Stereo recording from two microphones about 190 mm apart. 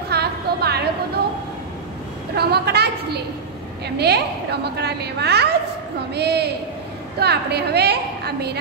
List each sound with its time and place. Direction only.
0.1 s a sound: 60° right (ahead or behind)
2.3 s a woman's voice: 60° right (ahead or behind)
4.0 s a woman's voice: 60° right (ahead or behind)